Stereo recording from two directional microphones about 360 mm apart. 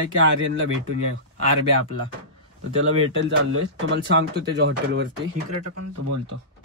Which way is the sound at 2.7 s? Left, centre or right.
Right.